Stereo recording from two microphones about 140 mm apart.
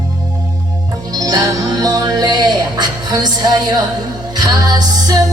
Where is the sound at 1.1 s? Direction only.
25° right (ahead or behind).